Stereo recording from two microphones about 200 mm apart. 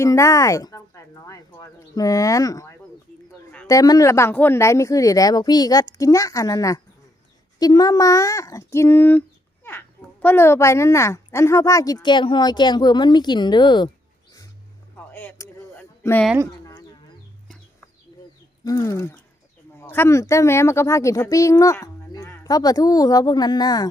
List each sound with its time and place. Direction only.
0.0 s a child's voice: 15° left (ahead or behind)
14.9 s a sound: 10° left (ahead or behind)
18.6 s speech: 15° left (ahead or behind)